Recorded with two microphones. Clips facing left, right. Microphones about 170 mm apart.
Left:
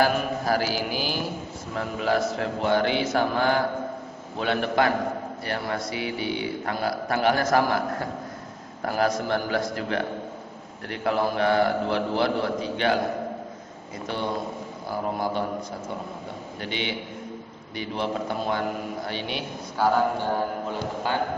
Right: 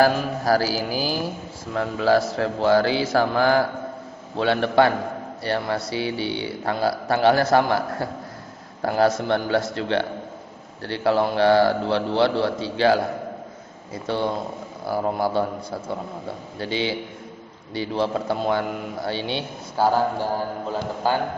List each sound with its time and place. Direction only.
0.0 s a man's voice: 40° right (ahead or behind)
16.6 s a man's voice: 30° right (ahead or behind)